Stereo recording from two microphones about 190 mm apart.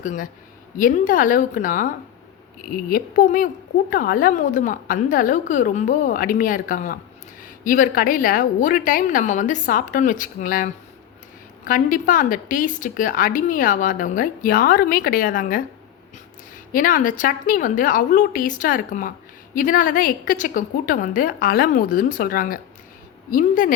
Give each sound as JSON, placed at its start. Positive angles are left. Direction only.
{"t": 0.0, "sound": "a woman's voice", "side_deg": 45}
{"t": 16.7, "sound": "a woman's voice", "side_deg": 45}